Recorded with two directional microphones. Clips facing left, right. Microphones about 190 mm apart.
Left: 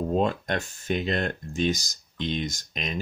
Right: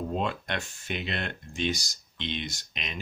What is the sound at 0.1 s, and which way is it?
Speech, 40° left (ahead or behind).